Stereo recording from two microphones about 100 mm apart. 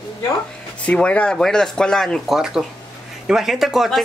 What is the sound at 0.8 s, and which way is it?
Speech, 10° left (ahead or behind).